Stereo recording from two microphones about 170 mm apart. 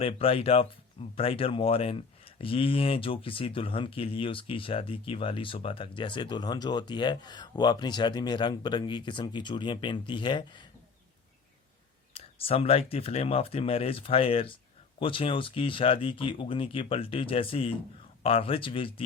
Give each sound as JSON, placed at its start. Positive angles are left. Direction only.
{"t": 0.0, "sound": "speech", "side_deg": 35}
{"t": 12.1, "sound": "speech", "side_deg": 35}